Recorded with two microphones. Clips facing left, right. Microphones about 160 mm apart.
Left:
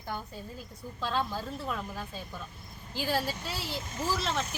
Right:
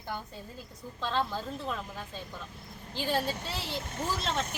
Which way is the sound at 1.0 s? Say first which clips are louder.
Even; 5° left (ahead or behind).